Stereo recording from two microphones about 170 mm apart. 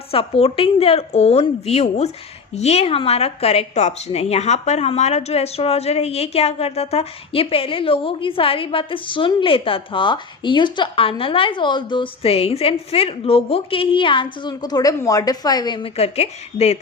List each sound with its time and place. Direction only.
0.1 s a woman's voice: 35° left (ahead or behind)